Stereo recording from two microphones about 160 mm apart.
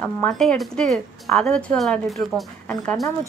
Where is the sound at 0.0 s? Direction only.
5° left (ahead or behind).